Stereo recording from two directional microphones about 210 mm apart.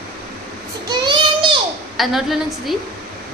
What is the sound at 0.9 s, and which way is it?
Child singing, 20° right (ahead or behind).